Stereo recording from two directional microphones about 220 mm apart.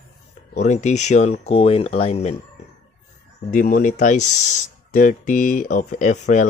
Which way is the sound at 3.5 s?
40° left (ahead or behind).